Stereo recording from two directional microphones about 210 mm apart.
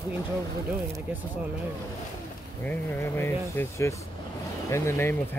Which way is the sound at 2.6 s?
10° left (ahead or behind).